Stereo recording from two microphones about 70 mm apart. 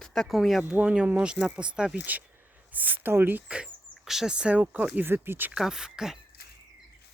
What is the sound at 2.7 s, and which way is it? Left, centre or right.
Speech, right.